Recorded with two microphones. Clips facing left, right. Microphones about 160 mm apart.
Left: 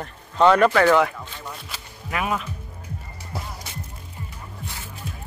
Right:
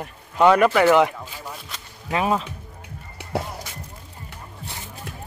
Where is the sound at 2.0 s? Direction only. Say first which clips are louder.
Right 4 dB; 30° right (ahead or behind).